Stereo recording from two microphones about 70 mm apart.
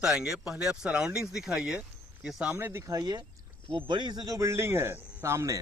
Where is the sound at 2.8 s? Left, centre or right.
Right.